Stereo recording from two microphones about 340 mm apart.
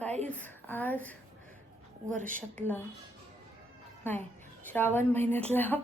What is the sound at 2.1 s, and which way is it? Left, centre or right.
Speech, right.